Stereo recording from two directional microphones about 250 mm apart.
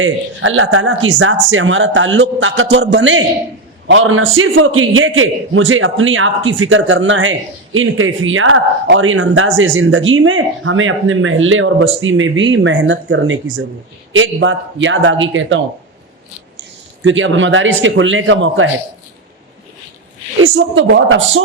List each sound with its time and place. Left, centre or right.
0.0 s a man's voice: right
20.4 s a man's voice: right